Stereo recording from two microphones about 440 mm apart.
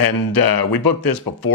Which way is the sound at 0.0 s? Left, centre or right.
Left.